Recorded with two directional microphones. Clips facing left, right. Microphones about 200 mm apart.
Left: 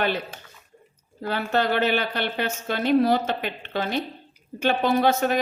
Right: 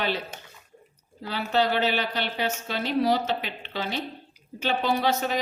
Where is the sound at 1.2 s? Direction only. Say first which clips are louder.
Left 1 dB; 50° left (ahead or behind).